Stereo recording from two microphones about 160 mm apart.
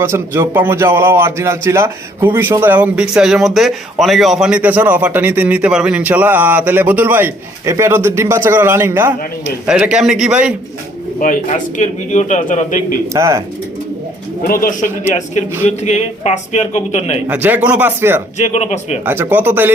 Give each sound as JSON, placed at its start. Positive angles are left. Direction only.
{"t": 0.0, "sound": "a man's voice", "side_deg": -15}
{"t": 11.2, "sound": "a man's voice", "side_deg": 55}
{"t": 13.1, "sound": "speech", "side_deg": -20}
{"t": 14.4, "sound": "a man's voice", "side_deg": 65}
{"t": 15.6, "sound": "a man's voice", "side_deg": 45}
{"t": 17.2, "sound": "a man's voice", "side_deg": -10}
{"t": 18.3, "sound": "a man's voice", "side_deg": 45}
{"t": 19.0, "sound": "a man's voice", "side_deg": -15}